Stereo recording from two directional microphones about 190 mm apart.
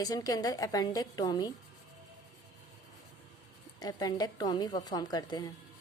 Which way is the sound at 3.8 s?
20° left (ahead or behind).